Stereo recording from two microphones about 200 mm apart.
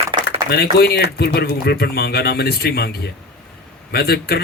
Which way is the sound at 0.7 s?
55° left (ahead or behind).